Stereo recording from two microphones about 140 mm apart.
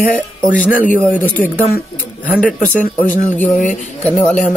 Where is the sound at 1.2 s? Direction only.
15° left (ahead or behind).